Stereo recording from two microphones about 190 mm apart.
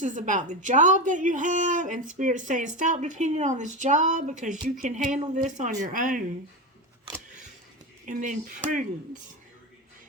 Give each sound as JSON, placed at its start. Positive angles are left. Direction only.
{"t": 0.0, "sound": "a woman's voice", "side_deg": -40}
{"t": 8.0, "sound": "a woman's voice", "side_deg": -45}